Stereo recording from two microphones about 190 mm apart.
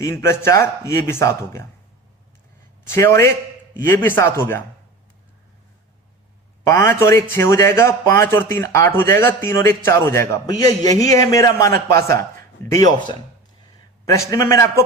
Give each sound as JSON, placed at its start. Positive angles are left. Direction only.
{"t": 0.0, "sound": "a man's voice", "side_deg": 15}
{"t": 2.9, "sound": "a man's voice", "side_deg": 15}
{"t": 6.7, "sound": "a man's voice", "side_deg": 15}
{"t": 14.3, "sound": "a man's voice", "side_deg": 15}